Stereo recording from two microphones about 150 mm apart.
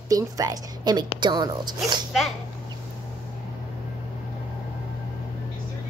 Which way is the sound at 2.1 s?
Centre (ahead or behind).